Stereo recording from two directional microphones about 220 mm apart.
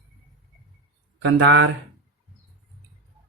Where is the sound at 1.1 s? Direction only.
55° right (ahead or behind).